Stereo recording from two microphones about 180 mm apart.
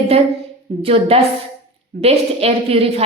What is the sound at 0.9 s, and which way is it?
A woman's voice, 35° right (ahead or behind).